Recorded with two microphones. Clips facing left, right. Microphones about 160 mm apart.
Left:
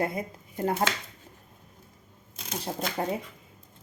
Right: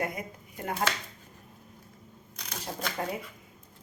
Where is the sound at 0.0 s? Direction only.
30° left (ahead or behind).